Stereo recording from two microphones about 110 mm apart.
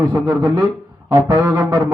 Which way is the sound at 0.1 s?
25° right (ahead or behind).